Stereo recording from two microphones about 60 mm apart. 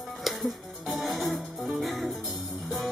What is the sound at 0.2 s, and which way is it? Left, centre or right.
Music, centre.